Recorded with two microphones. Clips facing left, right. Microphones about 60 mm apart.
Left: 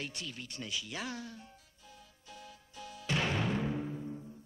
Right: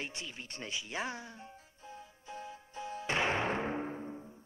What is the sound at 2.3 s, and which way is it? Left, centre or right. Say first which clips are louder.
Music: right 6 dB; right.